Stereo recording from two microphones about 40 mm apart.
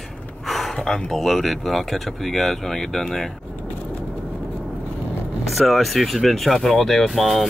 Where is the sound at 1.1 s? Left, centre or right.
Centre.